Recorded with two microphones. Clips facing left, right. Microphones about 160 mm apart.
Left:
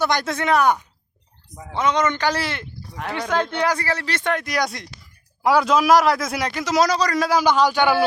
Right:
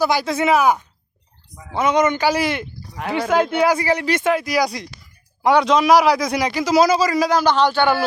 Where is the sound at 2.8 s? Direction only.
Centre (ahead or behind).